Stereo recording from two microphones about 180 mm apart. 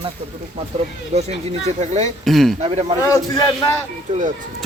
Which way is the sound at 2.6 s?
40° right (ahead or behind).